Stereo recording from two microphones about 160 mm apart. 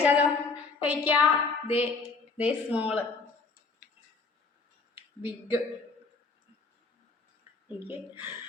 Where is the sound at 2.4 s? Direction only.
10° right (ahead or behind).